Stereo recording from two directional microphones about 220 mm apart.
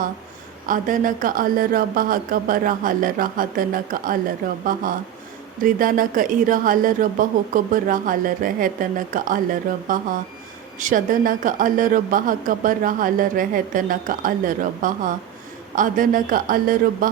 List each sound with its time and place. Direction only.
0.7 s a woman's voice: 40° right (ahead or behind)